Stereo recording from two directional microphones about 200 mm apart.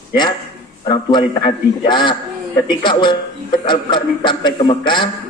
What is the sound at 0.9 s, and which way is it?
A man's voice, 20° left (ahead or behind).